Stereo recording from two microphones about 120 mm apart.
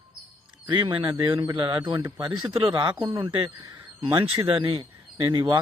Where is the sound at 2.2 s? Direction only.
40° right (ahead or behind).